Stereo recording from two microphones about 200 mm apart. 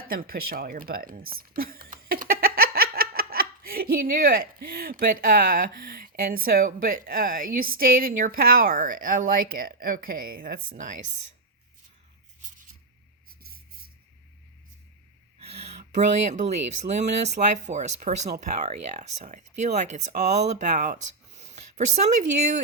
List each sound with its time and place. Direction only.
0.1 s speech: 45° right (ahead or behind)
13.4 s music: 50° right (ahead or behind)
15.4 s a sound: 30° right (ahead or behind)
15.8 s speech: 35° right (ahead or behind)